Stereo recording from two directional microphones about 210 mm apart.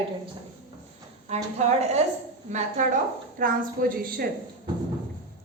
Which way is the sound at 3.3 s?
40° right (ahead or behind).